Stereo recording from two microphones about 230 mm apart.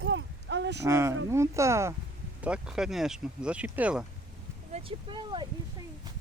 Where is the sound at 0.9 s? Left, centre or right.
Centre.